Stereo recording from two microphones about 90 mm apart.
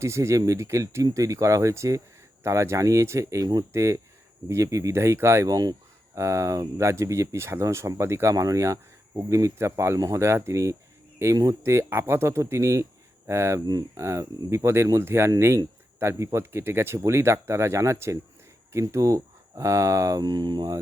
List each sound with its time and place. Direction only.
0.0 s speech: 35° right (ahead or behind); by 20.7 s 50° right (ahead or behind)